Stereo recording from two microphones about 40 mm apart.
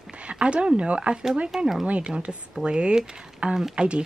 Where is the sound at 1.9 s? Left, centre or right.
Right.